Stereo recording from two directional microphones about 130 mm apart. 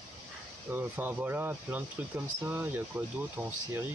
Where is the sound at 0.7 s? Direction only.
15° right (ahead or behind).